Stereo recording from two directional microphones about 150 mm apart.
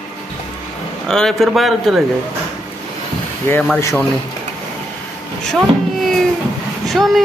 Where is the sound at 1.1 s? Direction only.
5° left (ahead or behind).